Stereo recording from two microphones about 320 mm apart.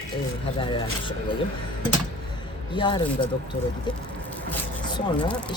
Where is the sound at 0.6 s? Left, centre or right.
Centre.